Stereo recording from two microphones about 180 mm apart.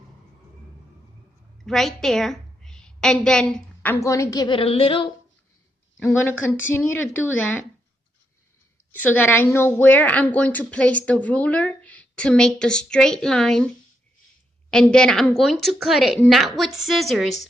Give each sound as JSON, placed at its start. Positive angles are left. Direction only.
{"t": 1.6, "sound": "a woman's voice", "side_deg": 0}
{"t": 5.9, "sound": "speech", "side_deg": 10}
{"t": 8.9, "sound": "a woman's voice", "side_deg": 10}
{"t": 14.7, "sound": "a woman's voice", "side_deg": 5}